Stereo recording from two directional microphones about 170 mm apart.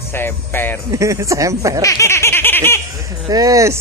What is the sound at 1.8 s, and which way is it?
Baby laughter, 15° left (ahead or behind).